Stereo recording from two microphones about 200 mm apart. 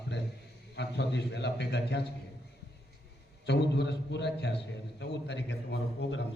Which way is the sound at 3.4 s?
55° left (ahead or behind).